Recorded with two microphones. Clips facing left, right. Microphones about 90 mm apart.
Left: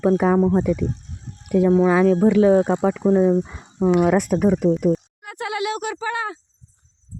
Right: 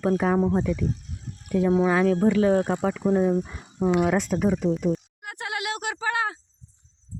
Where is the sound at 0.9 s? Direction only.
30° left (ahead or behind).